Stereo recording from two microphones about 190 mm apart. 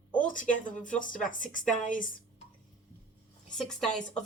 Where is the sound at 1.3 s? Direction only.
45° left (ahead or behind).